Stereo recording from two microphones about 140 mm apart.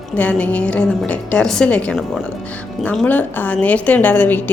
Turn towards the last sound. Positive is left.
turn(degrees=10)  # may be behind; listen again after turning